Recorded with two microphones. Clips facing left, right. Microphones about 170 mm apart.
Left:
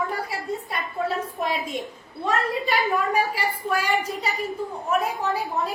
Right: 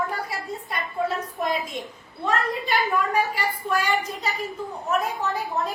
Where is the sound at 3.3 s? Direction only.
10° left (ahead or behind).